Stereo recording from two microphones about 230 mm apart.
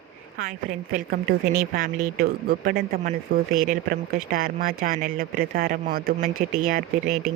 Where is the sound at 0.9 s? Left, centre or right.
Right.